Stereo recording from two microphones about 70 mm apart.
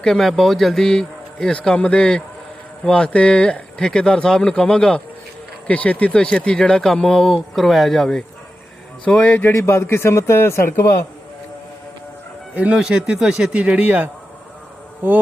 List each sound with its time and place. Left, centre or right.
0.0 s speech: centre
9.0 s a man's voice: left
9.5 s a man's voice: left
12.5 s speech: centre